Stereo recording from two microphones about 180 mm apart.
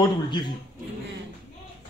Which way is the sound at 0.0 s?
25° left (ahead or behind).